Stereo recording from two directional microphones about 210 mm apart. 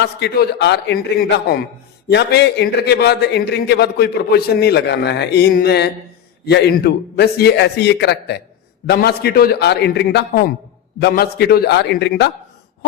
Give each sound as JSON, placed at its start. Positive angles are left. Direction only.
{"t": 0.0, "sound": "a man's voice", "side_deg": 50}